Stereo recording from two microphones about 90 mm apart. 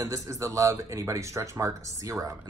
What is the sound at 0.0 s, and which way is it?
Speech, 35° right (ahead or behind).